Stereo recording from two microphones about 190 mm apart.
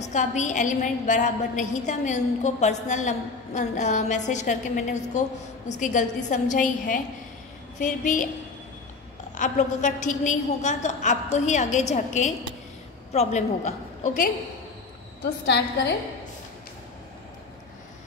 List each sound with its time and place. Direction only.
0.0 s a woman's voice: 40° left (ahead or behind)
9.4 s a woman's voice: 40° left (ahead or behind)
15.4 s a woman's voice: 65° left (ahead or behind)